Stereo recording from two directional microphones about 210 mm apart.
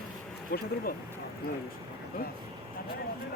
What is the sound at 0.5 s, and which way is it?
Speech, 45° left (ahead or behind).